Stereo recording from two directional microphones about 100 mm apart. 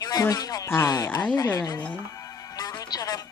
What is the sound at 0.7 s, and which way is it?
Speech, 25° left (ahead or behind).